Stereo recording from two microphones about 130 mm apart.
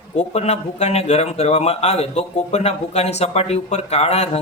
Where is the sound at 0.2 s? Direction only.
60° left (ahead or behind).